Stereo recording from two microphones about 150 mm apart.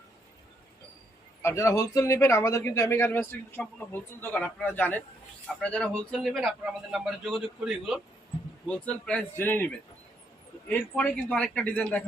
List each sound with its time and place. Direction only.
1.4 s a man's voice: 20° left (ahead or behind); by 8.0 s 5° right (ahead or behind)
8.6 s speech: 5° left (ahead or behind)